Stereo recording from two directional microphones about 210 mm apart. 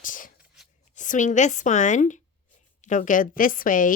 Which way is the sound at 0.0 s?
40° left (ahead or behind).